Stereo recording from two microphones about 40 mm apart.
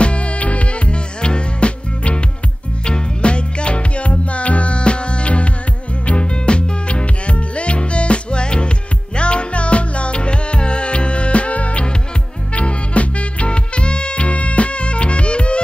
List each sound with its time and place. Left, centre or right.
0.0 s music: left